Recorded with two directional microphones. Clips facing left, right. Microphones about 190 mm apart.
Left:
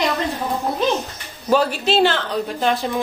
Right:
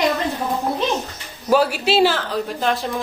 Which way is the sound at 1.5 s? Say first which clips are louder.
Right 1 dB; 5° right (ahead or behind).